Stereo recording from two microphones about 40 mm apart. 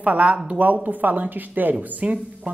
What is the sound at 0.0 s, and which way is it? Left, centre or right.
Speech, right.